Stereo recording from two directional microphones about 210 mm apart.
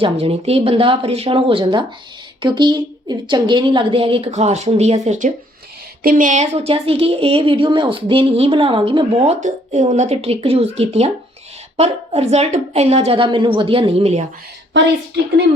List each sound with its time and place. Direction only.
0.0 s speech: 25° right (ahead or behind)
14.7 s a woman's voice: 55° right (ahead or behind)